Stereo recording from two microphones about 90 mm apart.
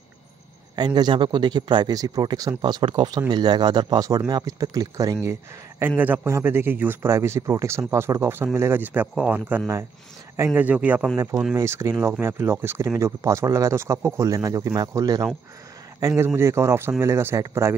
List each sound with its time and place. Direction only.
0.7 s speech: 50° right (ahead or behind)
2.6 s speech: 65° right (ahead or behind)
3.1 s speech: 50° right (ahead or behind); by 9.6 s 15° right (ahead or behind)
10.3 s speech: 30° right (ahead or behind)
10.6 s speech: 15° right (ahead or behind)
11.5 s speech: 35° right (ahead or behind)